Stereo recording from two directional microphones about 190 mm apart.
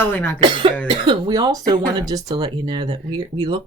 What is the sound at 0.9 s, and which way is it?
Speech, 25° right (ahead or behind).